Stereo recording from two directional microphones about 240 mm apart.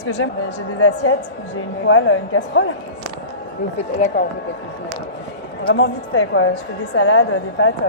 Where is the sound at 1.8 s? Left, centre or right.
Left.